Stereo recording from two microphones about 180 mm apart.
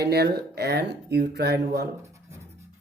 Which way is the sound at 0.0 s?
65° right (ahead or behind).